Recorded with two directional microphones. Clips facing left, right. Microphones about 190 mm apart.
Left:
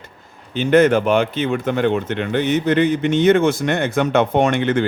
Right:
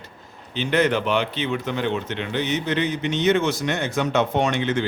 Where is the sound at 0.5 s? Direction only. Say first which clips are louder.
Left 7 dB; 50° left (ahead or behind).